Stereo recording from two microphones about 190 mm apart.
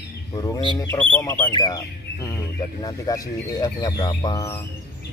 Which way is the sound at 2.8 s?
20° left (ahead or behind).